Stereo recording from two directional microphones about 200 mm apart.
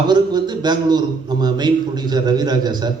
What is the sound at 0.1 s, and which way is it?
A man's voice, 20° right (ahead or behind).